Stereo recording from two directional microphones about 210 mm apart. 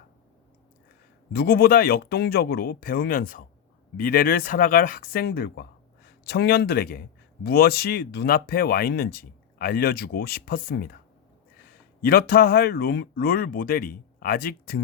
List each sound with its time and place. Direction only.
1.3 s a man's voice: 45° left (ahead or behind)
12.0 s speech: 45° left (ahead or behind)